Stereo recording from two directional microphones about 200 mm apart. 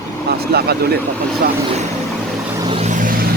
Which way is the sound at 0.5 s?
50° right (ahead or behind).